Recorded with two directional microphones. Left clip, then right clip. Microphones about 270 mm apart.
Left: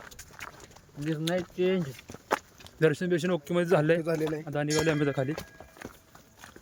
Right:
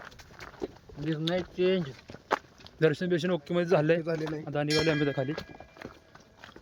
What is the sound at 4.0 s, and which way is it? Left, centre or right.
Speech, centre.